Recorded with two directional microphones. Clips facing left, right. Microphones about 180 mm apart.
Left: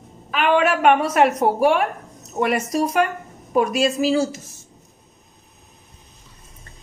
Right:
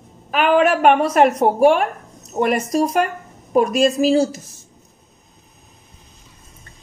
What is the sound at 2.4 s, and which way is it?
A woman's voice, 40° right (ahead or behind).